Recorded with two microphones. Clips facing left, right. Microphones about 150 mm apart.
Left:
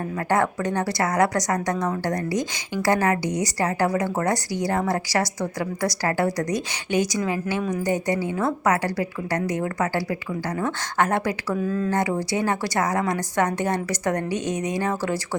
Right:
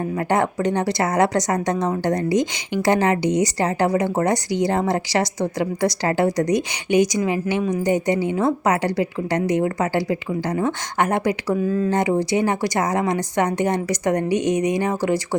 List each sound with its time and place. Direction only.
0.3 s a woman's voice: 20° right (ahead or behind)
11.9 s a woman's voice: 20° right (ahead or behind)